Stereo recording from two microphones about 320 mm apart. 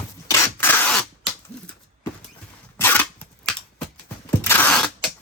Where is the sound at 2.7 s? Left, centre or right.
Centre.